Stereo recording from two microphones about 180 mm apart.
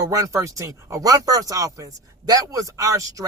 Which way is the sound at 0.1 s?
15° right (ahead or behind).